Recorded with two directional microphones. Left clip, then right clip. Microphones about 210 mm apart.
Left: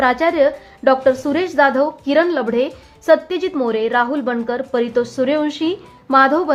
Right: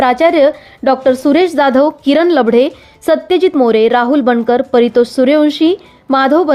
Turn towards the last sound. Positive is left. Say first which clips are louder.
# right 3 dB
turn(degrees=-25)  # may be behind; listen again after turning